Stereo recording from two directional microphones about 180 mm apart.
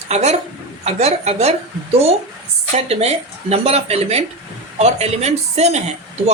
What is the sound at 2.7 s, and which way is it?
A woman's voice, 35° right (ahead or behind).